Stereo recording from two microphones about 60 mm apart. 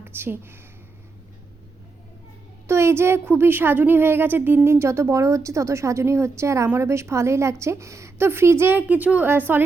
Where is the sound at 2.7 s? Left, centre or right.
Right.